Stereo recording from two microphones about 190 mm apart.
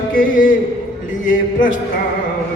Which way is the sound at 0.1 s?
45° left (ahead or behind).